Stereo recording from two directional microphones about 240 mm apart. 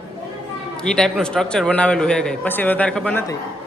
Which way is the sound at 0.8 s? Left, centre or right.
Centre.